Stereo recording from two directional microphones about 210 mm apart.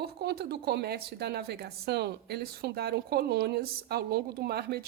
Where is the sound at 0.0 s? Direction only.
50° right (ahead or behind).